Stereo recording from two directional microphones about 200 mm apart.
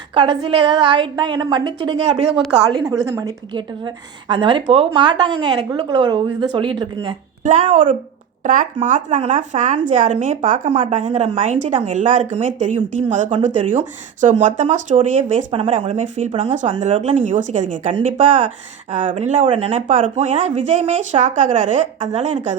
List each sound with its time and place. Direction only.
0.1 s a woman's voice: 25° right (ahead or behind)
7.4 s speech: 40° right (ahead or behind)